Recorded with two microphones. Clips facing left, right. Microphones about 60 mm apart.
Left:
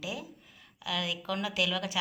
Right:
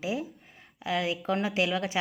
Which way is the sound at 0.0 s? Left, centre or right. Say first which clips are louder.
Right 7 dB; right.